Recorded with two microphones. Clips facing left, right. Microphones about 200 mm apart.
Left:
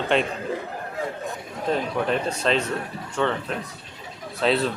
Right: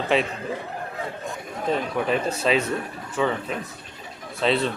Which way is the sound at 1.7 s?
5° right (ahead or behind).